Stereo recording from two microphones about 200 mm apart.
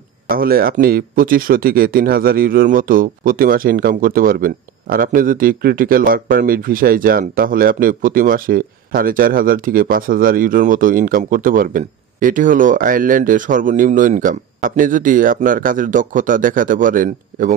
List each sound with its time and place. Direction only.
0.3 s speech: 45° right (ahead or behind)